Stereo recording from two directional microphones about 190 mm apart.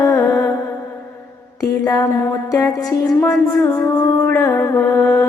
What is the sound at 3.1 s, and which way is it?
Music, 10° left (ahead or behind).